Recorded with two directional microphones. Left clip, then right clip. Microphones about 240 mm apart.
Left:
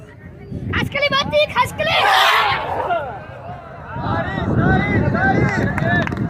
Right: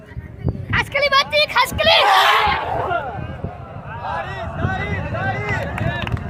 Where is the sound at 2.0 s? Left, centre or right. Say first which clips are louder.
Left 3 dB; centre.